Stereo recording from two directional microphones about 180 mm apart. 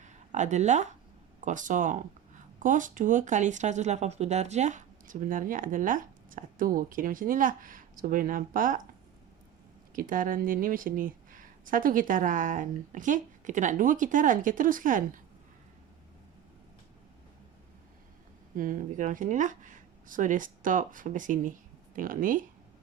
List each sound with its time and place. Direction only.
0.0 s a sound: 40° right (ahead or behind)
1.5 s speech: 45° right (ahead or behind)
9.9 s speech: 50° right (ahead or behind)
18.5 s speech: 50° right (ahead or behind)